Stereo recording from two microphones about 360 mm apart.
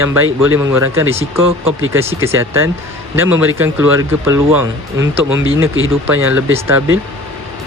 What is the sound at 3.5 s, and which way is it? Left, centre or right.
Speech, centre.